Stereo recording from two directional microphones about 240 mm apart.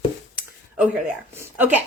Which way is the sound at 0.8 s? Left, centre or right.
Centre.